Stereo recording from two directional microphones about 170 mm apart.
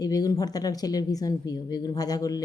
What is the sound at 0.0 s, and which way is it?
Speech, 20° left (ahead or behind).